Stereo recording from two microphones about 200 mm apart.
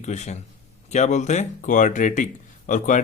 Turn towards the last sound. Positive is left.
turn(degrees=40)  # may be behind; listen again after turning